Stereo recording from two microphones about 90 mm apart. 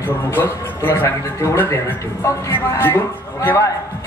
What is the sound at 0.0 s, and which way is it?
A man's voice, 25° left (ahead or behind).